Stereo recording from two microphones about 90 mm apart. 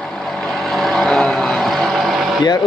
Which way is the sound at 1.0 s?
5° left (ahead or behind).